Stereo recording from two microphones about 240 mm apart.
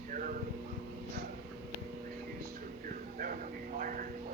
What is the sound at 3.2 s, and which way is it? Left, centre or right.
Speech, right.